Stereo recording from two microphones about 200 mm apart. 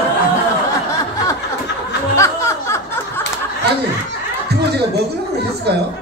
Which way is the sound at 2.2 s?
15° left (ahead or behind).